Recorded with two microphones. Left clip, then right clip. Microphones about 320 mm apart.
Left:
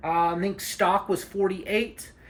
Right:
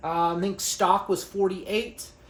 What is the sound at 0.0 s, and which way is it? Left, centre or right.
Speech, centre.